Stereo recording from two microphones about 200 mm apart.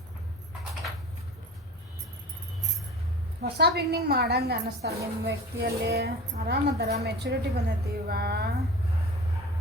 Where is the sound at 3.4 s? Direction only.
55° right (ahead or behind).